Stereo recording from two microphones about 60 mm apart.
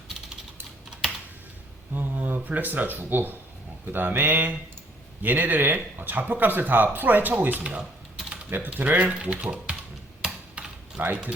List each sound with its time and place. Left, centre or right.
1.9 s speech: right
7.6 s speech: centre
8.4 s speech: right
10.2 s a sound: centre